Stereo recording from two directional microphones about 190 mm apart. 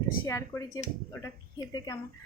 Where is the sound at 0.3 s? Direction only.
15° left (ahead or behind).